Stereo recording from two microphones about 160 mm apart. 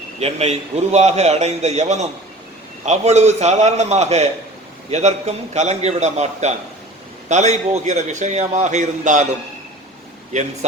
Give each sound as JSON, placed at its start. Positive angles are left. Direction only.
{"t": 0.2, "sound": "a man's voice", "side_deg": -40}
{"t": 10.3, "sound": "a man's voice", "side_deg": -50}